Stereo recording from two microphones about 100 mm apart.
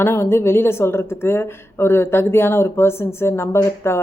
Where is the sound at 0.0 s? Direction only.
25° left (ahead or behind).